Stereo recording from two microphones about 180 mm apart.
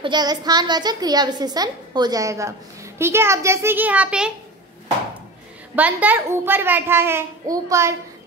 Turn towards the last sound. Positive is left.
turn(degrees=-15)  # may be behind; listen again after turning